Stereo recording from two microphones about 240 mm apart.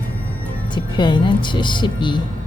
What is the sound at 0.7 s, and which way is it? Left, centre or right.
A woman's voice, centre.